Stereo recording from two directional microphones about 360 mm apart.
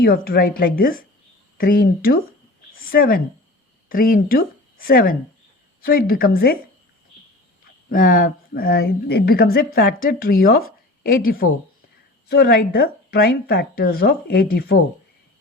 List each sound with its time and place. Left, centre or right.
0.0 s speech: left
2.7 s a sound: left
3.8 s speech: left
7.9 s speech: left